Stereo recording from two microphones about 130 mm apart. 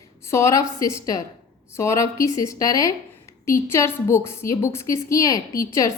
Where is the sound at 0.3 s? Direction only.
20° left (ahead or behind).